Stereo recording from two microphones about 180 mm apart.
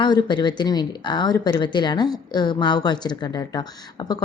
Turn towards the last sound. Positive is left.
turn(degrees=20)  # may be behind; listen again after turning